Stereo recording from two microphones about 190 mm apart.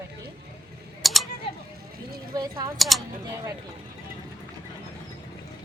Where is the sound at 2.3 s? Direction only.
20° right (ahead or behind).